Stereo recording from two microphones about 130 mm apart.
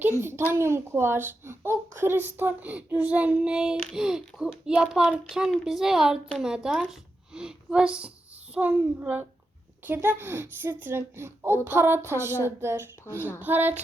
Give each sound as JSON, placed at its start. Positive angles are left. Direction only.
{"t": 0.2, "sound": "a child's voice", "side_deg": -20}